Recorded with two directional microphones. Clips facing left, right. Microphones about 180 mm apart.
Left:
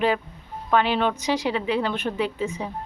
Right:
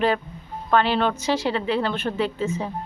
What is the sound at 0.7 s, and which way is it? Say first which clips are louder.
Speech: right 1 dB; 10° left (ahead or behind).